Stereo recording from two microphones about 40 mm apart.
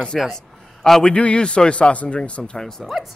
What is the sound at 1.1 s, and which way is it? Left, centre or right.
Speech, left.